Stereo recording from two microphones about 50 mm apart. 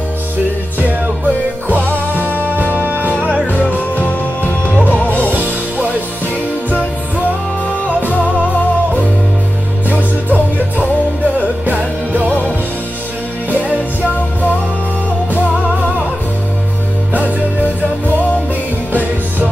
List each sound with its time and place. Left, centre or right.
0.7 s music: right
3.5 s music: left
5.3 s music: right
9.9 s music: left